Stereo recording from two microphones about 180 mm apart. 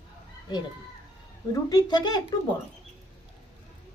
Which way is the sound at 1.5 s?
20° left (ahead or behind).